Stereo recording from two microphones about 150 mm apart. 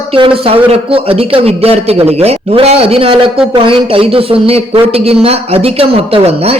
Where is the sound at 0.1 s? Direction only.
35° right (ahead or behind).